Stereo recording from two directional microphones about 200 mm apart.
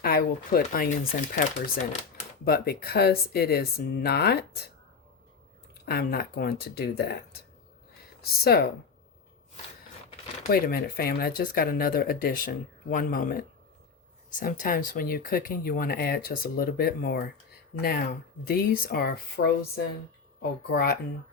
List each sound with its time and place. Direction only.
0.0 s speech: 50° left (ahead or behind)
2.4 s speech: 50° left (ahead or behind)
5.8 s speech: 50° left (ahead or behind)
10.5 s speech: 50° left (ahead or behind)